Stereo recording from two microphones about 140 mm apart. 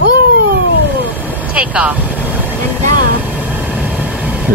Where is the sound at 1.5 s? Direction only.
10° right (ahead or behind).